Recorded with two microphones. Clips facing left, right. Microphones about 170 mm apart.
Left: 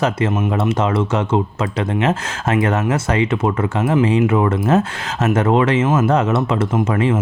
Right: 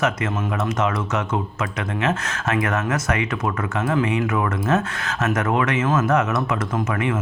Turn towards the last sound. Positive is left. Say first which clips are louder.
# left 6 dB
turn(degrees=30)  # may be behind; listen again after turning